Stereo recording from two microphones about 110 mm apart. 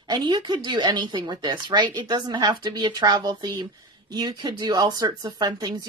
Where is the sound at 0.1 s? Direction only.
40° right (ahead or behind).